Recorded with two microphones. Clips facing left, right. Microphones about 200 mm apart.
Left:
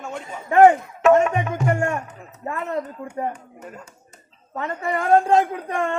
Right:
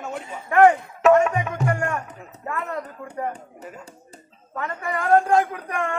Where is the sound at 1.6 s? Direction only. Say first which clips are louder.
Left 3 dB; 25° left (ahead or behind).